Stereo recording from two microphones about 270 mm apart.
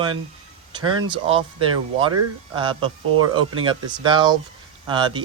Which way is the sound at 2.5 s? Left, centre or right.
Centre.